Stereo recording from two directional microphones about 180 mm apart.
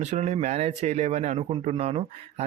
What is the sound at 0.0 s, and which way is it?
Speech, 40° right (ahead or behind).